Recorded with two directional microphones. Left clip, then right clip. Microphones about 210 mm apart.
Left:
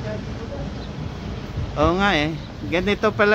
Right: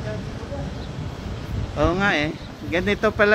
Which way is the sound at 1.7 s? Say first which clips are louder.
Left 2 dB; 10° left (ahead or behind).